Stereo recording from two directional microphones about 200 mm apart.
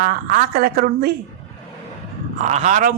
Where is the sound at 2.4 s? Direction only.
35° right (ahead or behind).